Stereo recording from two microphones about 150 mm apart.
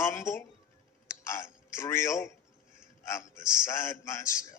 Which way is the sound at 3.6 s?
20° left (ahead or behind).